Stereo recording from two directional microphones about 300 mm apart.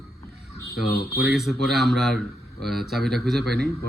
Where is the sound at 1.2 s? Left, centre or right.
Centre.